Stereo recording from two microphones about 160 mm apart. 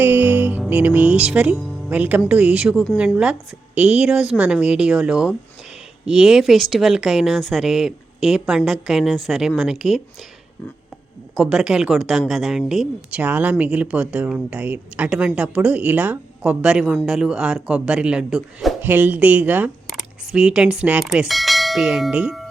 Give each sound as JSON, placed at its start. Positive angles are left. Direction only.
{"t": 0.0, "sound": "music", "side_deg": -10}
{"t": 0.7, "sound": "speech", "side_deg": -10}
{"t": 11.3, "sound": "speech", "side_deg": 0}